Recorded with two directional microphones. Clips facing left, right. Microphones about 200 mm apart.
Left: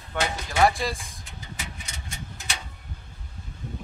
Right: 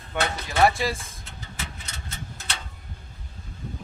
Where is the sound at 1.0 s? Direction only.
15° left (ahead or behind).